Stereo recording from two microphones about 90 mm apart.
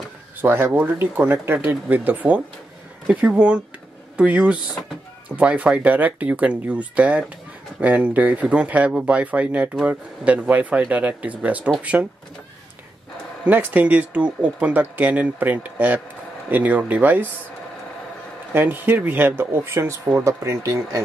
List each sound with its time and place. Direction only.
0.4 s speech: 25° right (ahead or behind)
13.4 s speech: 20° right (ahead or behind)
18.5 s speech: 20° right (ahead or behind); by 21.0 s 35° right (ahead or behind)